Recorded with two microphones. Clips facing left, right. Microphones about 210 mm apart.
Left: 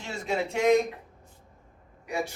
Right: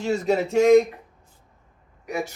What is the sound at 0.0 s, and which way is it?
Speech, 40° right (ahead or behind).